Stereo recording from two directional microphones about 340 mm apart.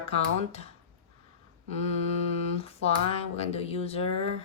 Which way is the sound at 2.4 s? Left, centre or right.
Centre.